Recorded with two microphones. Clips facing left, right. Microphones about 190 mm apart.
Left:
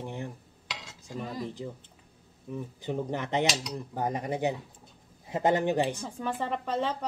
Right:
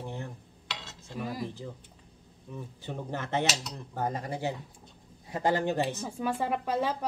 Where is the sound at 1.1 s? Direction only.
10° right (ahead or behind).